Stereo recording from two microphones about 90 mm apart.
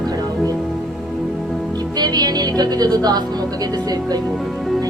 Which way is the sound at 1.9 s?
50° right (ahead or behind).